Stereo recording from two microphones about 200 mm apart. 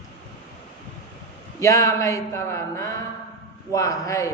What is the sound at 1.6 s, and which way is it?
A man's voice, 15° left (ahead or behind).